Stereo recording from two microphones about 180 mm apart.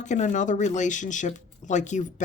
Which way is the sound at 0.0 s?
40° left (ahead or behind).